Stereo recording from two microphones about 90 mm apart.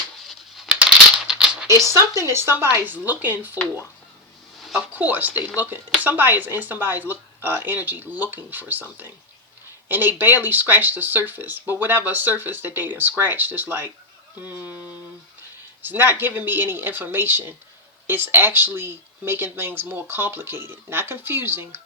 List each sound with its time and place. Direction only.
0.3 s coin: centre (ahead or behind)
1.3 s a sound: 10° right (ahead or behind)
1.6 s speech: 35° right (ahead or behind)
4.9 s speech: 20° right (ahead or behind)
15.8 s speech: 20° right (ahead or behind)